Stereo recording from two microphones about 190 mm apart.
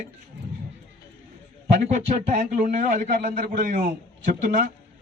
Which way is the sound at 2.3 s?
45° right (ahead or behind).